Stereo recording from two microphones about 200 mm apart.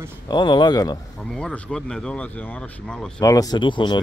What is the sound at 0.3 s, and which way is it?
Speech, 20° left (ahead or behind).